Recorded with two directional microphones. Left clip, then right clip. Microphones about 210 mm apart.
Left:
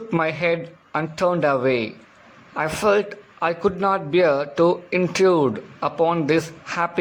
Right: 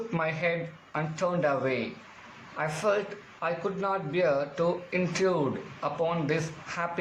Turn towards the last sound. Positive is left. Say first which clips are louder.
# left 9 dB
turn(degrees=45)  # may be behind; listen again after turning